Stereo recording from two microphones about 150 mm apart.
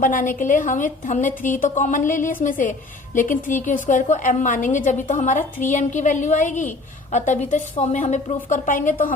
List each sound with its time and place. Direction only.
0.0 s a woman's voice: 60° left (ahead or behind)